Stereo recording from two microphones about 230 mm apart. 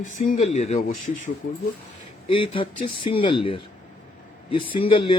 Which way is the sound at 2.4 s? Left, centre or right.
Left.